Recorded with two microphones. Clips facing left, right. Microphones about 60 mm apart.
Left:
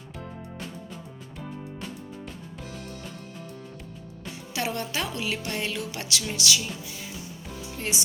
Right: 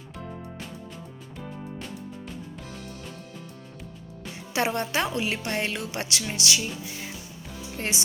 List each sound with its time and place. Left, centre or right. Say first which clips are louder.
4.5 s music: right 4 dB; right